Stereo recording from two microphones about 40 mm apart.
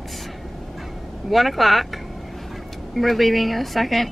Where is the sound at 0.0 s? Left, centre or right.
Centre.